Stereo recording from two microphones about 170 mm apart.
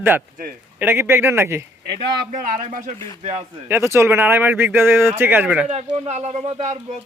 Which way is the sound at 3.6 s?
15° right (ahead or behind).